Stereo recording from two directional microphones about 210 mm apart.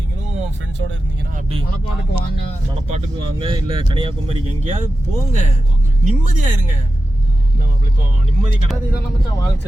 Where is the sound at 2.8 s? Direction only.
30° right (ahead or behind).